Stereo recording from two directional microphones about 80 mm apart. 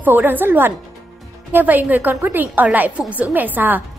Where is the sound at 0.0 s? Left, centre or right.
Right.